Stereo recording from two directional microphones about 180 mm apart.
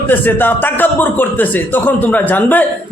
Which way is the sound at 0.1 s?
10° left (ahead or behind).